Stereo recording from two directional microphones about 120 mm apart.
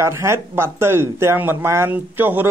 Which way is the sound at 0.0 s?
20° right (ahead or behind).